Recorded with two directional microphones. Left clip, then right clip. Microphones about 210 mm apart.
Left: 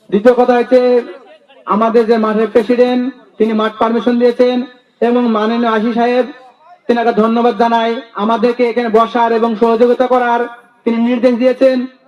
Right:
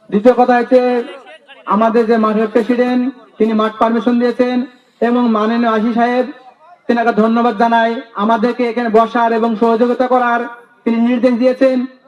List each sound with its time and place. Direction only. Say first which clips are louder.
0.1 s speech: left 1 dB; 30° left (ahead or behind)